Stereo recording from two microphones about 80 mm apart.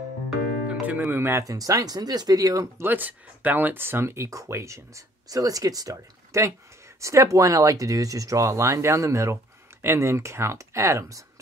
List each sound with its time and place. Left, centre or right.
0.7 s music: right
1.0 s speech: right
1.4 s speech: right
2.8 s speech: right